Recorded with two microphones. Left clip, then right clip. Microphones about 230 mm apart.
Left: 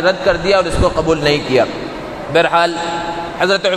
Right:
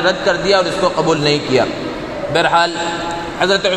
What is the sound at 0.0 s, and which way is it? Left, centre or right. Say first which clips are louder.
A man's voice: left 1 dB; left.